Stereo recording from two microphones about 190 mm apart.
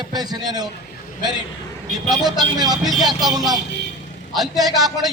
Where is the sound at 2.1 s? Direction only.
20° right (ahead or behind).